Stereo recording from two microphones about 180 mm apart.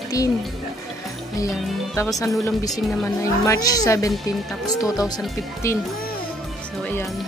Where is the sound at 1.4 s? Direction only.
15° left (ahead or behind).